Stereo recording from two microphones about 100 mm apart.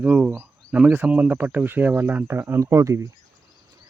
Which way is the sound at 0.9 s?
15° right (ahead or behind).